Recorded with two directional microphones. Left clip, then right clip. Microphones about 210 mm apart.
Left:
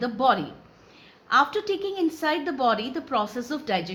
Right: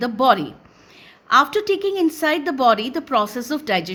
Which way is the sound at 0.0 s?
50° right (ahead or behind).